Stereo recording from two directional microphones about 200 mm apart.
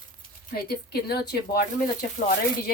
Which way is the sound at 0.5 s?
50° left (ahead or behind).